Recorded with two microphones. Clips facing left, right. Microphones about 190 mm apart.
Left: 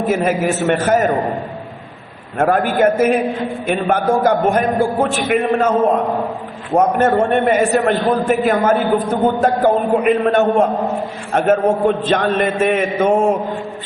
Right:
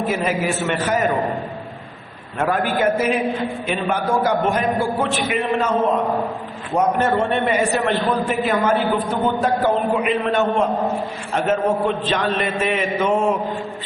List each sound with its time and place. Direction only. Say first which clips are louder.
0.1 s a man's voice: left 5 dB; 50° left (ahead or behind)
2.4 s a man's voice: left 5 dB; 45° left (ahead or behind)
6.7 s a man's voice: left 4 dB; 50° left (ahead or behind)